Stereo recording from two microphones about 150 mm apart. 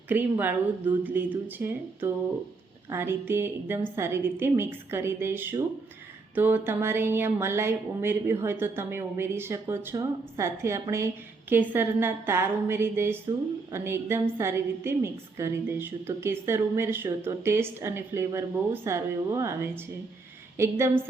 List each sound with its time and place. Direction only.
0.1 s speech: 10° right (ahead or behind)